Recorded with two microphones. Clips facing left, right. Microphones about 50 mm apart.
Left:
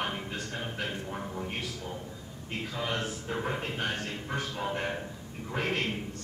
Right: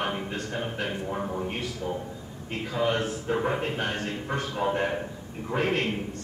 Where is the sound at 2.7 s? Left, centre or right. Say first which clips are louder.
Right 8 dB; centre.